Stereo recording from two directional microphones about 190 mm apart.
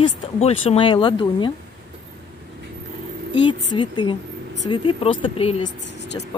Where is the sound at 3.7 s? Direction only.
25° left (ahead or behind).